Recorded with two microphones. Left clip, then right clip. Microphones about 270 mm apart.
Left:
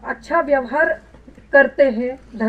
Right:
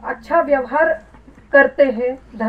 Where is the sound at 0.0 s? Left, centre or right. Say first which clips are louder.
Right 2 dB; right.